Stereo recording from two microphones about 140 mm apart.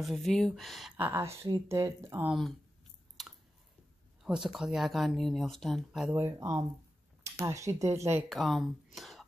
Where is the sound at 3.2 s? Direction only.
Centre (ahead or behind).